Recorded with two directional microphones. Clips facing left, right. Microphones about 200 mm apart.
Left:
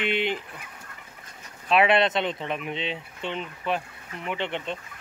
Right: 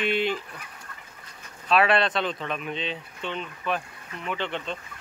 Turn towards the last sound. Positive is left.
turn(degrees=20)  # may be behind; listen again after turning